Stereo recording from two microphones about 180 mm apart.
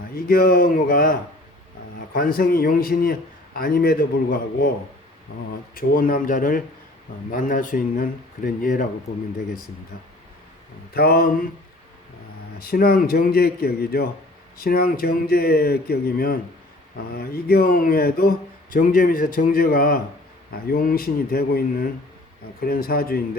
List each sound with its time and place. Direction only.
0.1 s a man's voice: 55° left (ahead or behind)
5.7 s speech: 55° left (ahead or behind)
10.9 s a man's voice: 55° left (ahead or behind)
12.5 s a man's voice: 55° left (ahead or behind)